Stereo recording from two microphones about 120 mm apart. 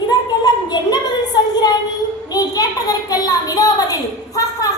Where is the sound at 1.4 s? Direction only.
35° left (ahead or behind).